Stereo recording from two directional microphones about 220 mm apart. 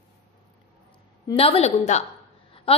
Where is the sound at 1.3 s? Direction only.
25° left (ahead or behind).